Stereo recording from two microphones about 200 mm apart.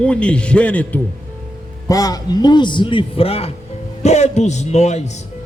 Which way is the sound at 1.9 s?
20° left (ahead or behind).